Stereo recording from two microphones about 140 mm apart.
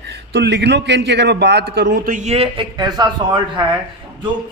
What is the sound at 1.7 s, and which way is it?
Speech, 90° right.